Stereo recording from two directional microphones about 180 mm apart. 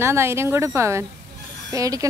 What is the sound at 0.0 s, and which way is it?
A woman's voice, 15° right (ahead or behind).